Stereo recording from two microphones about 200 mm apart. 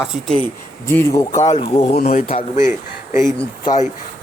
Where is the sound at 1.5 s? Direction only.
30° left (ahead or behind).